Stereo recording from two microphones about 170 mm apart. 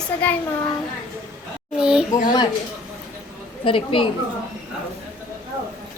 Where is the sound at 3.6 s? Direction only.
30° left (ahead or behind).